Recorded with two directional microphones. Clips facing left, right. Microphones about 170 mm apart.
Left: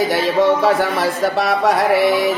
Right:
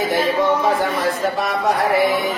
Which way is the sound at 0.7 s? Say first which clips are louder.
Left 2 dB; 80° left.